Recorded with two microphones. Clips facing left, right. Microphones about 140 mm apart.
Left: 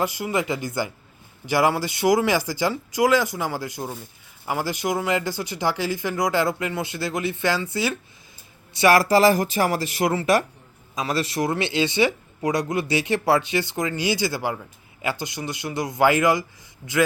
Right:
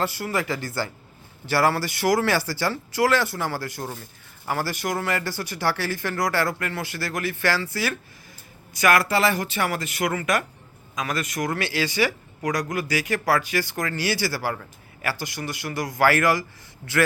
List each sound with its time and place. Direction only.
0.0 s speech: 15° left (ahead or behind)